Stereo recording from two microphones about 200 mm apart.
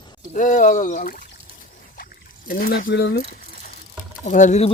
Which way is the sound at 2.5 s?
45° left (ahead or behind).